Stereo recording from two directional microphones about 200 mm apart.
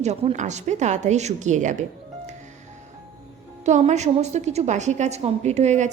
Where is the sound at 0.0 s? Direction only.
35° right (ahead or behind).